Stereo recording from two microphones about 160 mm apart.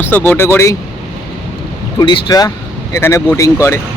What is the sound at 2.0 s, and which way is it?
Speech, 25° left (ahead or behind).